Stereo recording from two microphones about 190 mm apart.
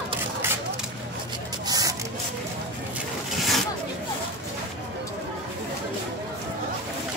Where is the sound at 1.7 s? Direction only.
20° right (ahead or behind).